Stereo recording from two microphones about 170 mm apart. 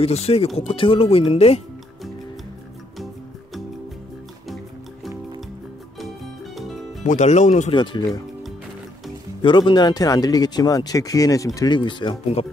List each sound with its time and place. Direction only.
0.0 s speech: 35° left (ahead or behind)
5.9 s music: centre (ahead or behind)
7.1 s speech: 45° left (ahead or behind)
7.7 s speech: 25° left (ahead or behind)
9.4 s speech: 30° left (ahead or behind)